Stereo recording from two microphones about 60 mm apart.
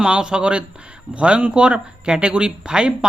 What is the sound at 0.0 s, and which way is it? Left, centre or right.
Speech, centre.